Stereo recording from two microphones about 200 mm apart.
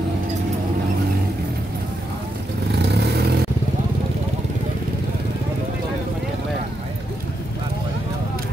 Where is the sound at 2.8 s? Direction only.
55° right (ahead or behind).